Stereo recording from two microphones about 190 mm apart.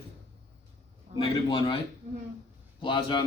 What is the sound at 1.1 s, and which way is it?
Speech, 25° left (ahead or behind).